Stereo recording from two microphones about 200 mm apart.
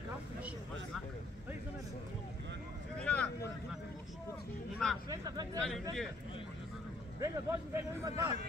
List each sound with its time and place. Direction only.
3.0 s vehicle: 5° left (ahead or behind)
4.8 s hubbub: 5° left (ahead or behind)
5.1 s speech: 20° right (ahead or behind)
7.2 s speech: 15° right (ahead or behind)